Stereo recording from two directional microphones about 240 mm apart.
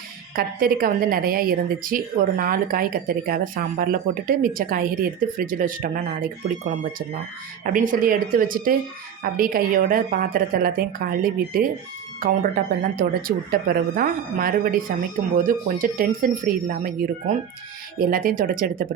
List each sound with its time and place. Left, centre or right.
0.3 s speech: right
7.6 s speech: right